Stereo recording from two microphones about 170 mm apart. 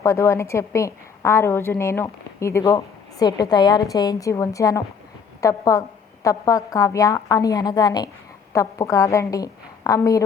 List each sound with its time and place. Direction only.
0.0 s a woman's voice: 15° left (ahead or behind)